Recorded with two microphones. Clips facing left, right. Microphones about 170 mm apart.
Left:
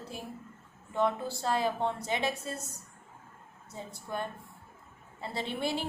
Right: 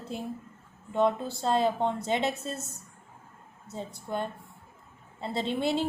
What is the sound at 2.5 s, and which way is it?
Speech, centre (ahead or behind).